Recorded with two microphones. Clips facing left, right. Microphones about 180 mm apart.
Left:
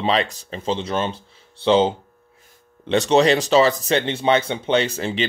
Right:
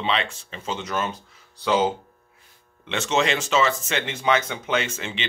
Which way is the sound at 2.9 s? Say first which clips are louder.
Left 7 dB; 35° left (ahead or behind).